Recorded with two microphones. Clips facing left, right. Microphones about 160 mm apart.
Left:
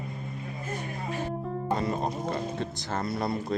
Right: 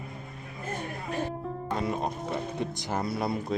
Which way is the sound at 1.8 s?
5° right (ahead or behind).